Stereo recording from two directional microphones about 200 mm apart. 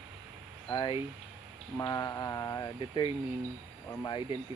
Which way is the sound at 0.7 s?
20° left (ahead or behind).